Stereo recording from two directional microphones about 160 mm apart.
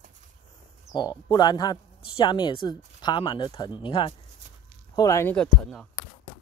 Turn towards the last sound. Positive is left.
turn(degrees=5)  # may be behind; listen again after turning